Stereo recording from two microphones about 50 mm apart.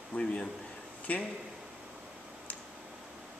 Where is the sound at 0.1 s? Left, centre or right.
Left.